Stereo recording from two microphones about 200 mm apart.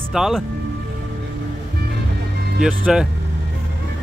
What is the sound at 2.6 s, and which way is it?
Speech, 5° right (ahead or behind).